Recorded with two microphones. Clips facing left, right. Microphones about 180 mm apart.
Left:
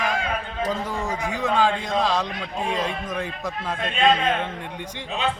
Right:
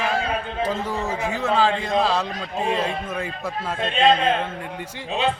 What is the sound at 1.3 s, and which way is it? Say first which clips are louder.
A man's voice: right 1 dB; 5° right (ahead or behind).